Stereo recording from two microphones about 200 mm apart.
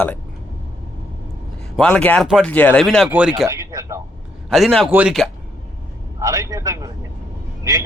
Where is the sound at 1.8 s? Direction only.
5° left (ahead or behind).